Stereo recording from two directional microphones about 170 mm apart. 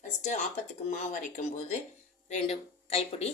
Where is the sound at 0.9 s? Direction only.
45° left (ahead or behind).